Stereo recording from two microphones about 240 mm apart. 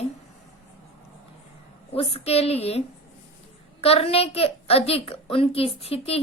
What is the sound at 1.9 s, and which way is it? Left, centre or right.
Speech, left.